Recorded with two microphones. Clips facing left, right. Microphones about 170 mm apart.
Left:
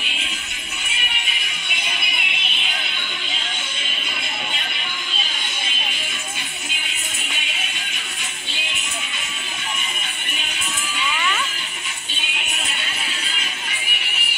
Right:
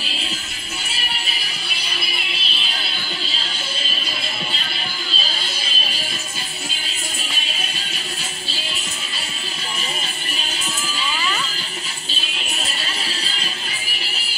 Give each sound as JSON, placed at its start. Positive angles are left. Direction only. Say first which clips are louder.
{"t": 0.0, "sound": "music", "louder": "right 3 dB", "side_deg": -35}
{"t": 5.1, "sound": "music", "louder": "right 2 dB", "side_deg": -35}
{"t": 7.3, "sound": "music", "louder": "right 2 dB", "side_deg": -35}
{"t": 12.1, "sound": "music", "louder": "even", "side_deg": -35}
{"t": 13.9, "sound": "music", "louder": "right 1 dB", "side_deg": -30}